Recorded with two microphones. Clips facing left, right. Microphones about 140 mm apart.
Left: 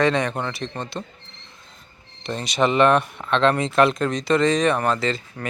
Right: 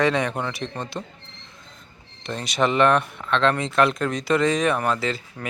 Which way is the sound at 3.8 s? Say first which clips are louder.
Left 2 dB; centre (ahead or behind).